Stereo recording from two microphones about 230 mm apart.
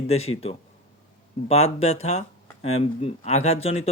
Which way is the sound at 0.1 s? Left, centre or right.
Left.